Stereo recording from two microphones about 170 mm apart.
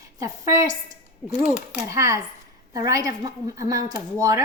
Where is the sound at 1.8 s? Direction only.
15° right (ahead or behind).